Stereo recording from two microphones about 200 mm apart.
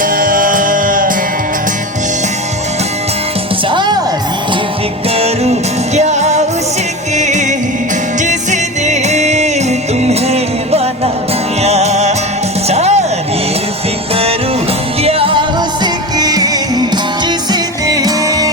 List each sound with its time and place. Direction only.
0.0 s music: 45° right (ahead or behind)
3.7 s music: 25° right (ahead or behind)
5.1 s music: 30° right (ahead or behind)
15.0 s music: 25° right (ahead or behind)